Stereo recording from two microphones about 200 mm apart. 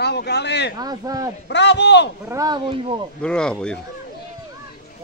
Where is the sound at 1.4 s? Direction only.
60° left (ahead or behind).